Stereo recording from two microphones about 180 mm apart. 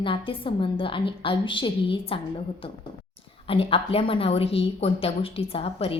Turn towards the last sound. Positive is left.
turn(degrees=30)  # may be behind; listen again after turning